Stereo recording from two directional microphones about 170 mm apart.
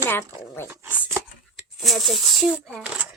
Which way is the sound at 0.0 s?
15° left (ahead or behind).